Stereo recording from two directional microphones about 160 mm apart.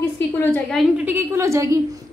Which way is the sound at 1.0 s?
10° right (ahead or behind).